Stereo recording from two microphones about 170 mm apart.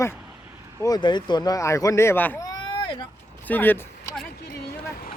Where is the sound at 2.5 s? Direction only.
25° left (ahead or behind).